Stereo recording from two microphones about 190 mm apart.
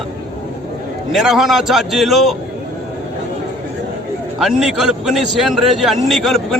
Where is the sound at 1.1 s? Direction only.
Centre (ahead or behind).